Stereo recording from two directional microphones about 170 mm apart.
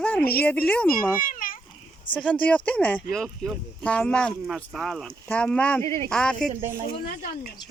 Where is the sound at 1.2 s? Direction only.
55° left (ahead or behind).